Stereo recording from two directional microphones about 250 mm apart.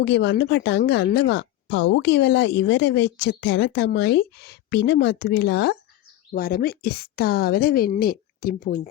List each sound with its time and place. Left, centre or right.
0.0 s a woman's voice: left